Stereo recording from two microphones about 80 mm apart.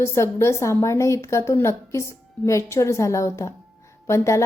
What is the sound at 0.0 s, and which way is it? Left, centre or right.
A woman's voice, left.